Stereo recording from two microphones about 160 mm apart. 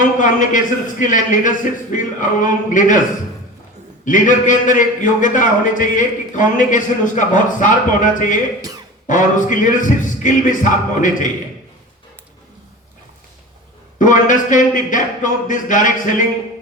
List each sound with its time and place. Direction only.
0.2 s a man's voice: 55° left (ahead or behind)
4.0 s a man's voice: 55° left (ahead or behind)
14.0 s a man's voice: 55° left (ahead or behind)